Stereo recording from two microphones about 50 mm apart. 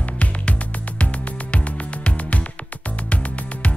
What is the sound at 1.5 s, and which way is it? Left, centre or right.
Music, left.